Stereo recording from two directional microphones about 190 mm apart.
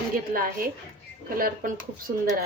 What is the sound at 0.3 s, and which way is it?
Speech, 50° right (ahead or behind).